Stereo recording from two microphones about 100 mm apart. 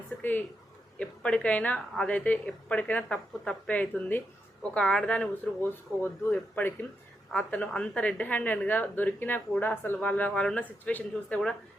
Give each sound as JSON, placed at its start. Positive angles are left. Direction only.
{"t": 0.2, "sound": "a woman's voice", "side_deg": 20}
{"t": 5.6, "sound": "a woman's voice", "side_deg": 20}